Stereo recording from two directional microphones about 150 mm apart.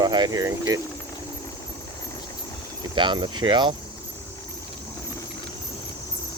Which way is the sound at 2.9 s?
30° right (ahead or behind).